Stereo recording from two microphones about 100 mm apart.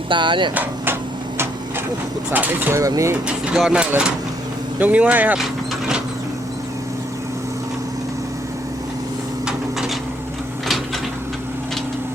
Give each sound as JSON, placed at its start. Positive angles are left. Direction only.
{"t": 0.1, "sound": "speech", "side_deg": -55}
{"t": 0.5, "sound": "speech", "side_deg": -20}
{"t": 2.3, "sound": "speech", "side_deg": -15}
{"t": 2.7, "sound": "speech", "side_deg": -30}
{"t": 3.2, "sound": "speech", "side_deg": -10}
{"t": 9.5, "sound": "a sound", "side_deg": -5}